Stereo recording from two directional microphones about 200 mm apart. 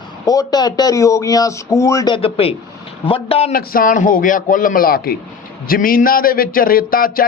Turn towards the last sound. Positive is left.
turn(degrees=45)  # may be behind; listen again after turning